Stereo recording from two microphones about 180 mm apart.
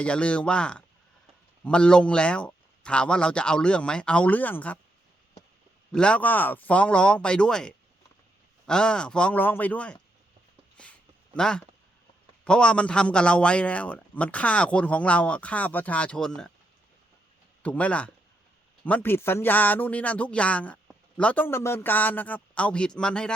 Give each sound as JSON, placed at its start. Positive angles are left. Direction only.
{"t": 0.0, "sound": "speech", "side_deg": 5}
{"t": 5.9, "sound": "speech", "side_deg": 5}
{"t": 11.3, "sound": "speech", "side_deg": 5}
{"t": 17.6, "sound": "speech", "side_deg": 10}